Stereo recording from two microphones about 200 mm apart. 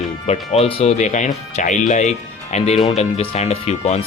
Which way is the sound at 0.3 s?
30° left (ahead or behind).